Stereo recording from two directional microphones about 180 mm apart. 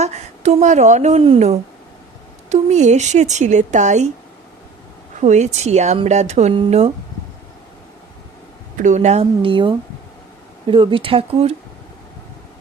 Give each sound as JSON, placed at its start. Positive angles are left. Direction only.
{"t": 0.0, "sound": "a woman's voice", "side_deg": -40}
{"t": 5.2, "sound": "speech", "side_deg": -40}
{"t": 8.8, "sound": "speech", "side_deg": -40}